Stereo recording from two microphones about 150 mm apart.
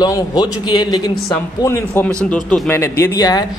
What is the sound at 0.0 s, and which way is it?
Speech, 30° left (ahead or behind).